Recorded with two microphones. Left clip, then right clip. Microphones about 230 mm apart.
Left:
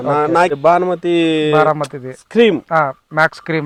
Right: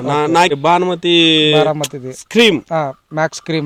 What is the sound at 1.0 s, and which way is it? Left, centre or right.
Speech, right.